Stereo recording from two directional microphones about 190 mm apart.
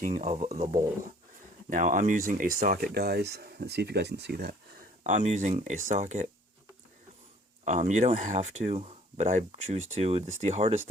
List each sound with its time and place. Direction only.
0.0 s speech: 40° right (ahead or behind); by 4.5 s 60° right (ahead or behind)
5.0 s speech: 40° right (ahead or behind)
7.6 s speech: 40° right (ahead or behind)